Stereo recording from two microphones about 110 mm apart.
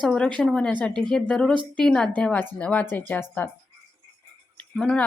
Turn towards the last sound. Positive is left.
turn(degrees=5)  # may be behind; listen again after turning